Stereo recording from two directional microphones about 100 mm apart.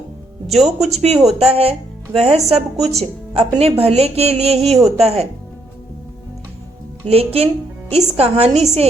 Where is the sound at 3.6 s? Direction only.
80° right.